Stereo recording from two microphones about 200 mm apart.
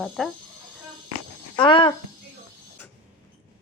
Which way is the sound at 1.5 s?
25° left (ahead or behind).